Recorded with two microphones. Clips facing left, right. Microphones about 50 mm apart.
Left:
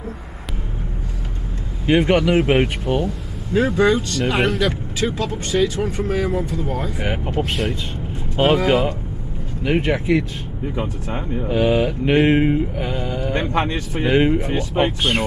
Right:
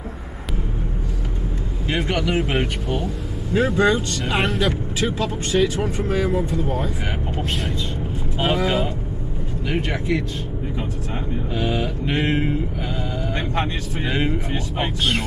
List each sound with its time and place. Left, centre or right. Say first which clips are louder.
1.9 s speech: left 7 dB; left
3.5 s speech: left 2 dB; centre
7.0 s speech: left 4 dB; centre
8.5 s speech: left 4 dB; centre
11.4 s speech: left 8 dB; left